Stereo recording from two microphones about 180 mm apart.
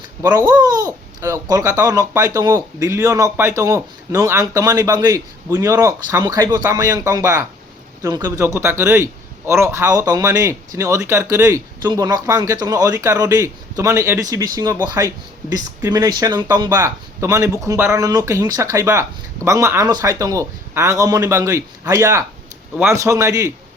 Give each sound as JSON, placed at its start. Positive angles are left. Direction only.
{"t": 0.2, "sound": "speech", "side_deg": -20}